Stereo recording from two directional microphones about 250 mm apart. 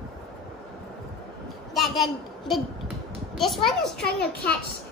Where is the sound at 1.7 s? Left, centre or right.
Centre.